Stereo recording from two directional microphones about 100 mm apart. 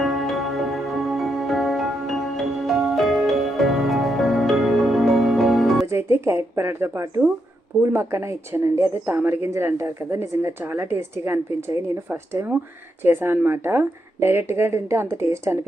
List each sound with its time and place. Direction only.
0.0 s music: centre (ahead or behind)
5.8 s a woman's voice: 25° right (ahead or behind)